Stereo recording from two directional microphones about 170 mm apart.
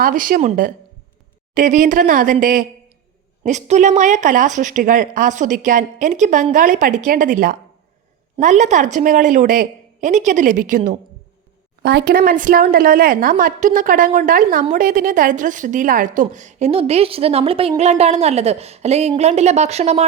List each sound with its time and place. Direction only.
0.0 s a woman's voice: 55° right (ahead or behind)
11.8 s a woman's voice: 75° right (ahead or behind); by 20.1 s 40° right (ahead or behind)